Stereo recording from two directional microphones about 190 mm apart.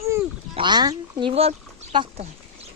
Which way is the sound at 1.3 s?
30° right (ahead or behind).